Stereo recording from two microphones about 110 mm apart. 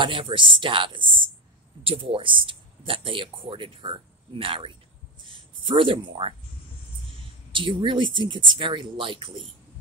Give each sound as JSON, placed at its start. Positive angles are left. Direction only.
{"t": 0.0, "sound": "speech", "side_deg": -50}
{"t": 7.5, "sound": "speech", "side_deg": -50}